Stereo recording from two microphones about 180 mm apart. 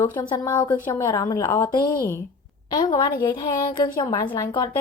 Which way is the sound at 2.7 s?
25° left (ahead or behind).